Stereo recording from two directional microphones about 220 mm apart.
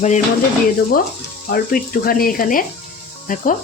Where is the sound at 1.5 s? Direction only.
40° left (ahead or behind).